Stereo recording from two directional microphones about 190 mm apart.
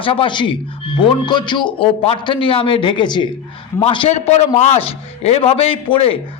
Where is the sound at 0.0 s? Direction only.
25° left (ahead or behind).